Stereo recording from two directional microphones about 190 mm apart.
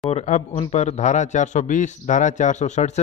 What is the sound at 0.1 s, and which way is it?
A man's voice, 35° left (ahead or behind).